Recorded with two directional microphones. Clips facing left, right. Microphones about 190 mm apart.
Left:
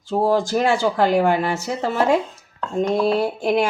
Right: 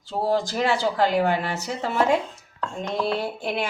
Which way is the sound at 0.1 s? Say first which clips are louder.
Left 5 dB; 45° left (ahead or behind).